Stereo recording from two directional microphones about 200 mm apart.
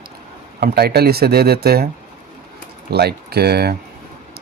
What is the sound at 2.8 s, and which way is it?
Speech, 55° right (ahead or behind).